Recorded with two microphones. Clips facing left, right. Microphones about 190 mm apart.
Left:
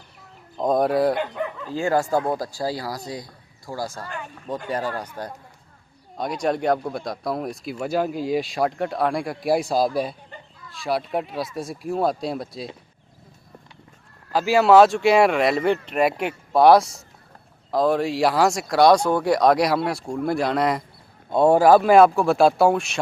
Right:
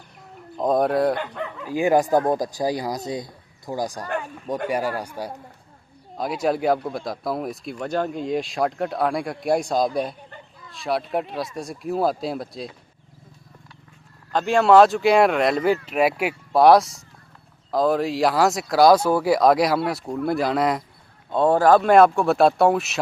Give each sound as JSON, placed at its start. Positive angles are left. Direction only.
{"t": 0.5, "sound": "speech", "side_deg": 0}
{"t": 1.6, "sound": "speech", "side_deg": -15}
{"t": 14.3, "sound": "speech", "side_deg": 5}
{"t": 21.2, "sound": "speech", "side_deg": 10}